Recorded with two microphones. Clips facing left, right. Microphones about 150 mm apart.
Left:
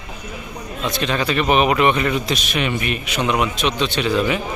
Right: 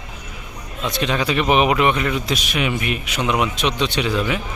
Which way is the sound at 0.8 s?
10° right (ahead or behind).